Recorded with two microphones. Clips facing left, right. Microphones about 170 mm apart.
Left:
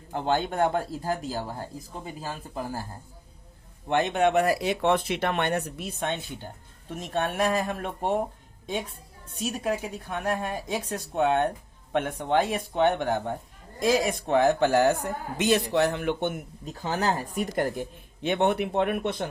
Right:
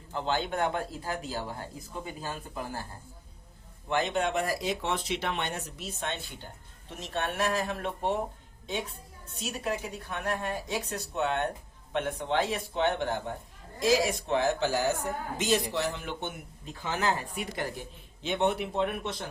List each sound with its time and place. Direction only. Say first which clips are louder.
0.1 s speech: left 4 dB; 50° left (ahead or behind); by 2.8 s 35° left (ahead or behind)
3.8 s a woman's voice: left 5 dB; 60° left (ahead or behind)
7.7 s speech: left 3 dB; 50° left (ahead or behind)
9.3 s a woman's voice: left 5 dB; 50° left (ahead or behind)
16.6 s speech: left 3 dB; 40° left (ahead or behind); by 19.3 s 60° left (ahead or behind)